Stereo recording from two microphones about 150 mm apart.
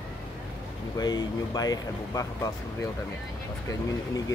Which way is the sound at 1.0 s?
25° left (ahead or behind).